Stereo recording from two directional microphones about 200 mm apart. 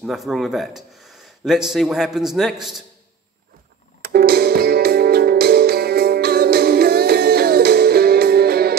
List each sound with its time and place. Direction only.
0.0 s speech: centre (ahead or behind)
4.1 s music: 50° right (ahead or behind)